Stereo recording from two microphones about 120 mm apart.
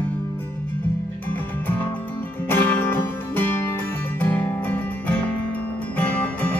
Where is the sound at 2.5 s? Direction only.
15° left (ahead or behind).